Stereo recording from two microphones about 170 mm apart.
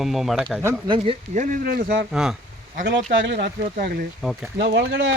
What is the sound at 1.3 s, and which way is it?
Speech, 55° right (ahead or behind).